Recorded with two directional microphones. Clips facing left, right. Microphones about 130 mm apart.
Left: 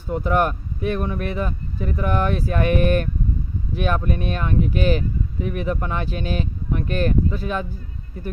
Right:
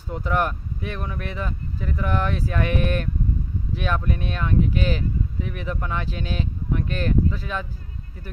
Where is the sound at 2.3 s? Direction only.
55° left (ahead or behind).